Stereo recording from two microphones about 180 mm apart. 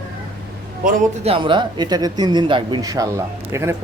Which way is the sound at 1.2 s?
30° right (ahead or behind).